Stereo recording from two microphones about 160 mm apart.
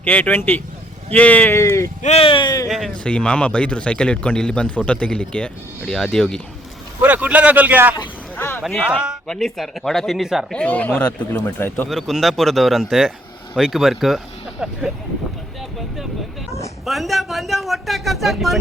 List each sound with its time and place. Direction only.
0.0 s a man's voice: 10° left (ahead or behind)
2.0 s speech: 40° left (ahead or behind); by 2.6 s 25° left (ahead or behind)
2.6 s a man's voice: 5° left (ahead or behind)
7.0 s a man's voice: 10° right (ahead or behind)
8.4 s a sound: 15° left (ahead or behind)
8.6 s a man's voice: 5° right (ahead or behind); by 11.9 s 15° left (ahead or behind)
11.9 s speech: centre (ahead or behind)
16.8 s speech: centre (ahead or behind)